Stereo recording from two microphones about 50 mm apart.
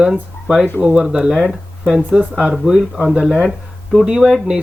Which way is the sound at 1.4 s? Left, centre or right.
Centre.